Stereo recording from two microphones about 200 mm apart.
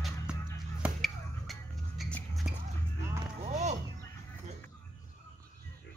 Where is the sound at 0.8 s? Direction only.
Centre (ahead or behind).